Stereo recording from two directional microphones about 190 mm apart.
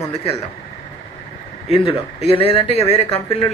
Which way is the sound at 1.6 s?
30° left (ahead or behind).